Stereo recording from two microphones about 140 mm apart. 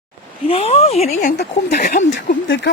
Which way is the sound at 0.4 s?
45° left (ahead or behind).